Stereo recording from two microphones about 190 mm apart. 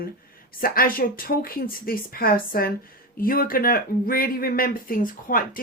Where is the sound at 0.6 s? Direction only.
50° left (ahead or behind).